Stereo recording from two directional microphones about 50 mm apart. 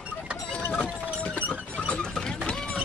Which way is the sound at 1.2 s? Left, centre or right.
Left.